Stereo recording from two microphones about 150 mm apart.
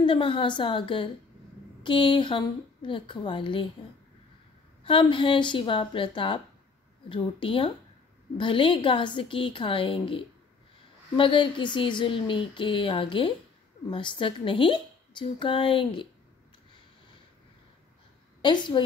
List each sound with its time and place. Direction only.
0.0 s a woman's voice: 35° left (ahead or behind)
4.8 s a woman's voice: 35° left (ahead or behind)
18.4 s a woman's voice: 30° left (ahead or behind)